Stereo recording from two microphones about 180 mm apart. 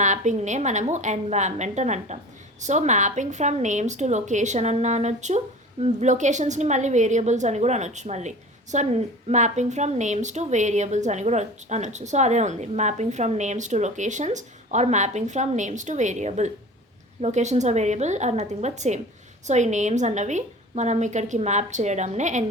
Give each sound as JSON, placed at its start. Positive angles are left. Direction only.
{"t": 0.0, "sound": "a woman's voice", "side_deg": -40}